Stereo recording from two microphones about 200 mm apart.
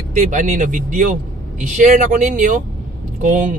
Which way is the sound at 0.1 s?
40° right (ahead or behind).